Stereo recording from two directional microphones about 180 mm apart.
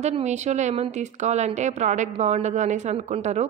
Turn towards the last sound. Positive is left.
turn(degrees=-40)  # may be behind; listen again after turning